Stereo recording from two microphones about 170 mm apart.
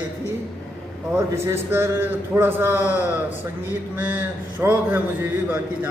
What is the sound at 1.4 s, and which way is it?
A man's voice, 15° right (ahead or behind).